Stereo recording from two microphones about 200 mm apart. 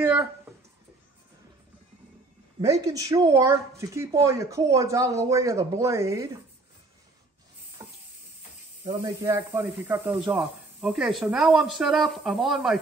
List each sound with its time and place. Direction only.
0.0 s a sound: 10° right (ahead or behind)
2.6 s speech: 15° right (ahead or behind)
8.8 s speech: 15° right (ahead or behind); by 12.8 s centre (ahead or behind)